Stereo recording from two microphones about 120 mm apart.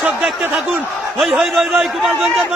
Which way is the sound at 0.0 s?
10° right (ahead or behind).